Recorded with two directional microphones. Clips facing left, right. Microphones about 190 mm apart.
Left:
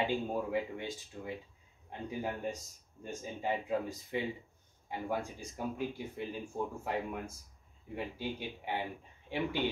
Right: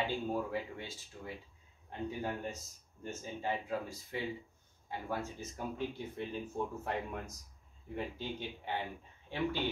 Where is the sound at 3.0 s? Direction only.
15° left (ahead or behind).